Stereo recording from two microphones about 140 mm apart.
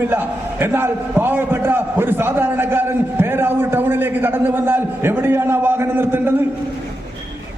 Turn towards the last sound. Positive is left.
turn(degrees=-15)  # may be behind; listen again after turning